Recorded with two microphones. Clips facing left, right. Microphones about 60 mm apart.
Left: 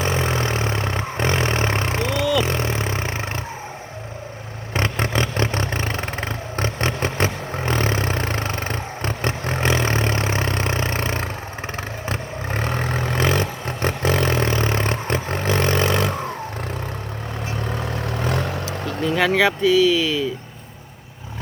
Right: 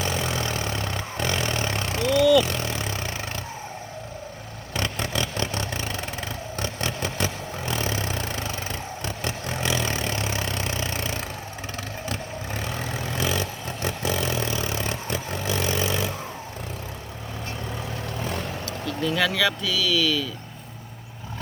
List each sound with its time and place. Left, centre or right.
0.0 s vehicle: left
2.4 s a sound: left
4.7 s vehicle: left
17.7 s vehicle: left
18.9 s speech: left